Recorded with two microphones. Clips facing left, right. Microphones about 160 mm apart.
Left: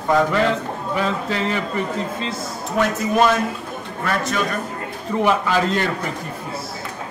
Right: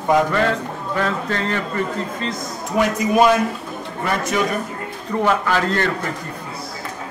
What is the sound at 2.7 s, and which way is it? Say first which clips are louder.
A man's voice: right 2 dB; 10° right (ahead or behind).